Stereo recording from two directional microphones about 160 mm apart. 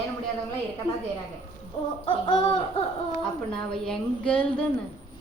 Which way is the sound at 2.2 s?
30° left (ahead or behind).